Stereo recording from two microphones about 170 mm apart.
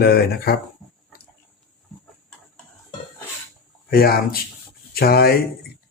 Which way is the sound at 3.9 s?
65° left (ahead or behind).